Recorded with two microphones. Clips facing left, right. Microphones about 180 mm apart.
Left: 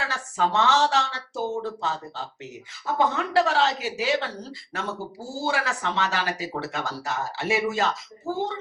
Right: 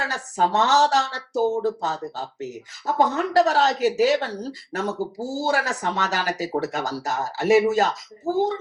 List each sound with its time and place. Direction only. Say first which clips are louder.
0.1 s speech: right 3 dB; 40° right (ahead or behind)